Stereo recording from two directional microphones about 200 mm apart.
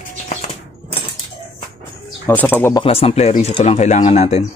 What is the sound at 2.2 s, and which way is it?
Speech, 10° left (ahead or behind).